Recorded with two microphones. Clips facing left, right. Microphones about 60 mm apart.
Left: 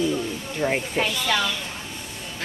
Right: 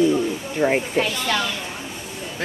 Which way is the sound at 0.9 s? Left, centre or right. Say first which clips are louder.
Right 2 dB; centre.